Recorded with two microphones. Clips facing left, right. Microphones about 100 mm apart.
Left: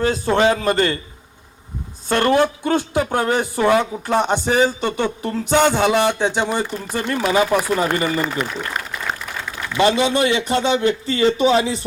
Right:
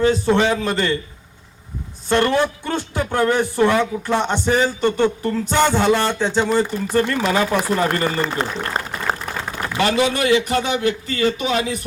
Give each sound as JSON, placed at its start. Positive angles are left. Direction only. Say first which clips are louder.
{"t": 0.3, "sound": "a man's voice", "louder": "left 2 dB", "side_deg": 50}
{"t": 2.0, "sound": "speech", "louder": "left 1 dB", "side_deg": 15}
{"t": 8.3, "sound": "a sound", "louder": "right 1 dB", "side_deg": -30}
{"t": 9.7, "sound": "a man's voice", "louder": "left 2 dB", "side_deg": 20}